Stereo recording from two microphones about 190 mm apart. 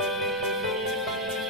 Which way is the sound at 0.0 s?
Centre (ahead or behind).